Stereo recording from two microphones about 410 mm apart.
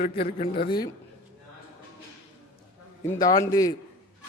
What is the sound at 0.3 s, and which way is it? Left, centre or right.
Speech, centre.